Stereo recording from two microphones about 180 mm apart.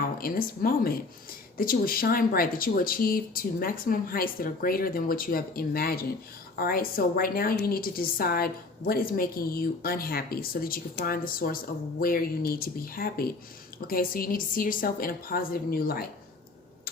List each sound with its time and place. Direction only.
0.2 s a woman's voice: 55° left (ahead or behind)